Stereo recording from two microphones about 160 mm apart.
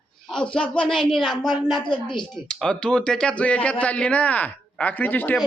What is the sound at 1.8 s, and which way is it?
Speech, 30° left (ahead or behind).